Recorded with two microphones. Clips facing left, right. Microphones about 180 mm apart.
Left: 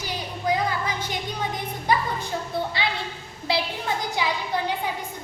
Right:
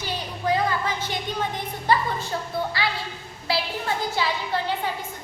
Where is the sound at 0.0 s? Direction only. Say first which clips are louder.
Even; 15° left (ahead or behind).